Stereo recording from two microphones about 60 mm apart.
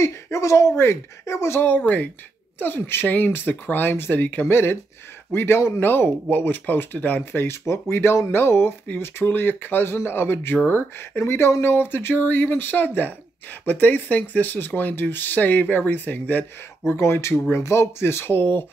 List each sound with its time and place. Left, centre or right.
0.0 s speech: left
6.3 s speech: left